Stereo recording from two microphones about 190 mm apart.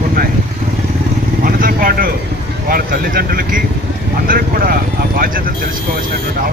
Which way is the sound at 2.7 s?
50° right (ahead or behind).